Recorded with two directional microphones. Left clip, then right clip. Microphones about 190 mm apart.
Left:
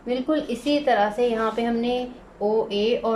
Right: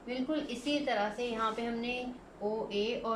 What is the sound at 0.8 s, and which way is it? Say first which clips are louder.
A woman's voice: left 16 dB; 45° left (ahead or behind).